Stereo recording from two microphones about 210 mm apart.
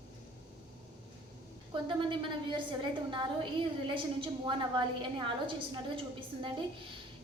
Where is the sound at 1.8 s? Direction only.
25° right (ahead or behind).